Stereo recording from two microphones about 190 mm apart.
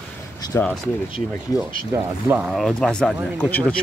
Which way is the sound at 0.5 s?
15° left (ahead or behind).